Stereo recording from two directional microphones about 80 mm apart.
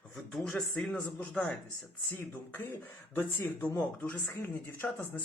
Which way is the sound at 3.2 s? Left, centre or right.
Left.